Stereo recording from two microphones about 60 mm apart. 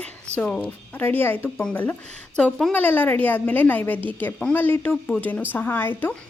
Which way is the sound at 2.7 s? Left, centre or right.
Left.